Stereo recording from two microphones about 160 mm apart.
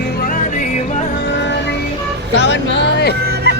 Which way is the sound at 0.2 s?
55° left (ahead or behind).